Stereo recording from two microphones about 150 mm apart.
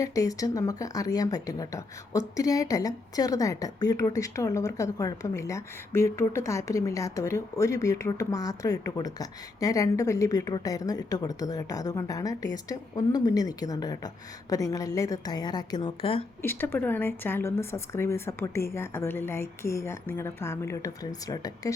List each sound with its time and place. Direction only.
0.0 s speech: 20° left (ahead or behind)
16.4 s speech: 15° left (ahead or behind)